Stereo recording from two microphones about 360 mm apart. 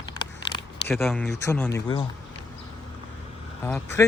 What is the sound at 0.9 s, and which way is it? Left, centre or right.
Speech, centre.